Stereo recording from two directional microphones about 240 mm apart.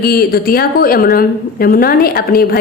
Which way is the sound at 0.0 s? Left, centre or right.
Left.